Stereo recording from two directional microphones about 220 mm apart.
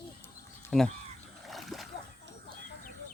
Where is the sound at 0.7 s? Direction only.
Centre (ahead or behind).